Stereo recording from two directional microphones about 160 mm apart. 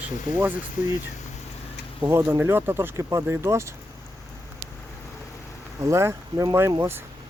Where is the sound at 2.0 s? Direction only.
15° right (ahead or behind).